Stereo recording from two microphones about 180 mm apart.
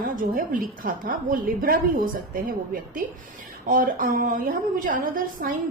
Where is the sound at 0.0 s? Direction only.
50° right (ahead or behind).